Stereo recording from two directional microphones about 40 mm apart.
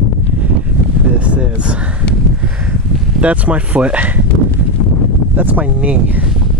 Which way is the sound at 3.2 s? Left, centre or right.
Right.